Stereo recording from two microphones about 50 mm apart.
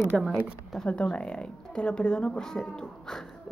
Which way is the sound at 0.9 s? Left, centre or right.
Left.